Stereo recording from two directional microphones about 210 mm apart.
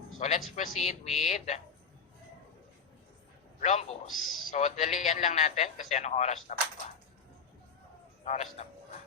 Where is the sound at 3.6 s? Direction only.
30° left (ahead or behind).